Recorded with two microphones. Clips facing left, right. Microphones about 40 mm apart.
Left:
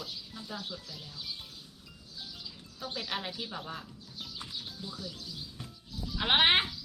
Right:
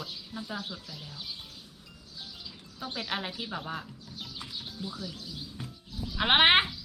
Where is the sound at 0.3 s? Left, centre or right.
Centre.